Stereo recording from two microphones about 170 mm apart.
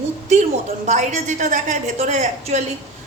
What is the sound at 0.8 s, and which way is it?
Speech, 45° right (ahead or behind).